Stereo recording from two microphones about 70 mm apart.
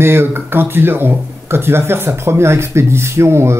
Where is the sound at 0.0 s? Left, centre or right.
Right.